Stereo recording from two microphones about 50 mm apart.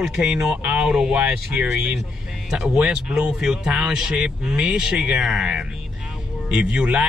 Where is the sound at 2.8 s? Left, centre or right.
Centre.